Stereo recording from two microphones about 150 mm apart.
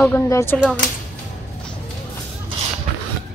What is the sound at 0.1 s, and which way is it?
Speech, 15° left (ahead or behind).